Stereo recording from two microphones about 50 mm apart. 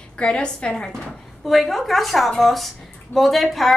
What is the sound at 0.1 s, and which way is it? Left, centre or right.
Speech, centre.